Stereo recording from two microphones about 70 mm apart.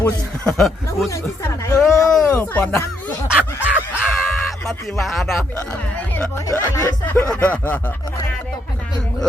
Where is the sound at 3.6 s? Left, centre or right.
Right.